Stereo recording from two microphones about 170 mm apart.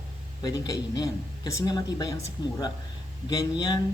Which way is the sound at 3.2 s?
20° left (ahead or behind).